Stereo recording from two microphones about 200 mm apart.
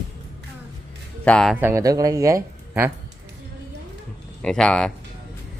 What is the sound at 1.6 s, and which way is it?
Speech, 15° right (ahead or behind).